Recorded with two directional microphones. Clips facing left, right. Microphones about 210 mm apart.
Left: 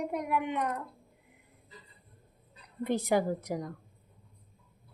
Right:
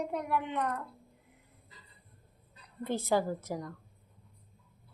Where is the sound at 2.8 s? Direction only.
15° left (ahead or behind).